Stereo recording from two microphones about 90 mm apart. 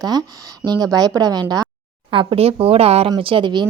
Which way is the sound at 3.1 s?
65° right (ahead or behind).